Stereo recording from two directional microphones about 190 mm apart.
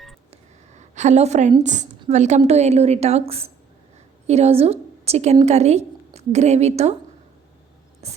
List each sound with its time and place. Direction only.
0.3 s a sound: 40° right (ahead or behind)
1.6 s a woman's voice: 40° right (ahead or behind)
8.0 s a woman's voice: 35° right (ahead or behind)